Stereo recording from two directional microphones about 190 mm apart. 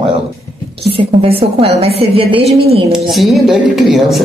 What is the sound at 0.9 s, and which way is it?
A woman's voice, 30° right (ahead or behind).